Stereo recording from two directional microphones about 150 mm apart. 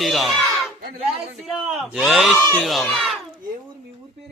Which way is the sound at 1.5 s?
Centre (ahead or behind).